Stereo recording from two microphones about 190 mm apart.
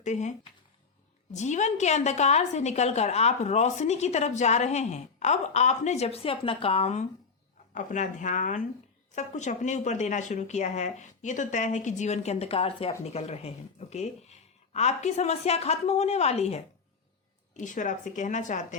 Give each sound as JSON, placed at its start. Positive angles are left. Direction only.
{"t": 0.0, "sound": "a woman's voice", "side_deg": 40}